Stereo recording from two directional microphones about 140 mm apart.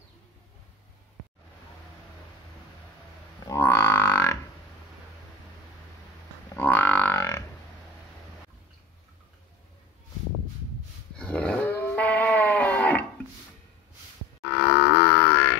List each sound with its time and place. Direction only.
3.4 s music: 15° left (ahead or behind)
6.5 s music: 10° left (ahead or behind)
11.1 s sheep: 10° left (ahead or behind)
14.4 s grunt: 10° left (ahead or behind)